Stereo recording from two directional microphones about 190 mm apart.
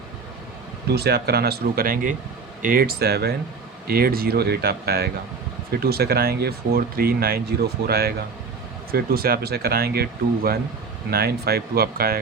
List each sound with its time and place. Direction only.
0.9 s speech: 55° right (ahead or behind)